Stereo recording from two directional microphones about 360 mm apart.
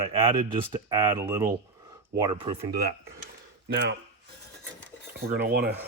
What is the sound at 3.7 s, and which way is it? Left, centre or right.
Speech, right.